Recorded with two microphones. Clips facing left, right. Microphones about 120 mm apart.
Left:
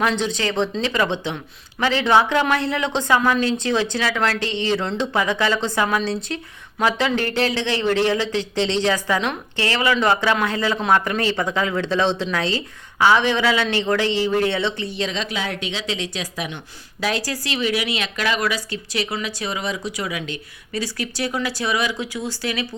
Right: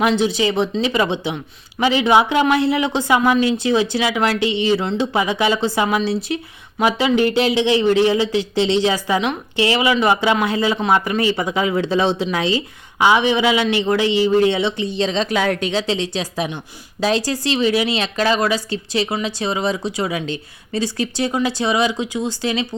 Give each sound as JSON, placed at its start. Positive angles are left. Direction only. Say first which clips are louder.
{"t": 0.0, "sound": "speech", "louder": "right 5 dB", "side_deg": -10}
{"t": 14.9, "sound": "speech", "louder": "right 6 dB", "side_deg": -30}
{"t": 15.3, "sound": "speech", "louder": "right 8 dB", "side_deg": -50}